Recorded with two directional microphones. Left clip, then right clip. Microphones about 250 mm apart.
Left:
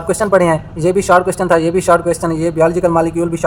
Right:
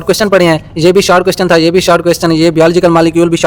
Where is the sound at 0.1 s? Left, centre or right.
Right.